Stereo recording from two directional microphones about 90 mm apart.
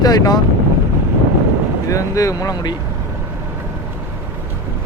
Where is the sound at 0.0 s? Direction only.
45° left (ahead or behind).